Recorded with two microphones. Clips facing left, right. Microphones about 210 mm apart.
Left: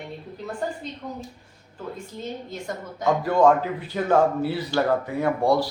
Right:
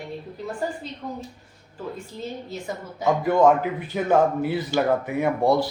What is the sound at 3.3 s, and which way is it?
A man's voice, 10° right (ahead or behind).